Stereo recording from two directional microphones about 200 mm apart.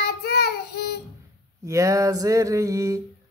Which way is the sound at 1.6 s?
15° right (ahead or behind).